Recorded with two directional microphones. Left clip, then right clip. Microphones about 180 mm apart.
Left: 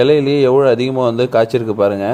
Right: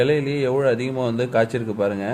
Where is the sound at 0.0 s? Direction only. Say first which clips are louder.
Left 9 dB; 30° left (ahead or behind).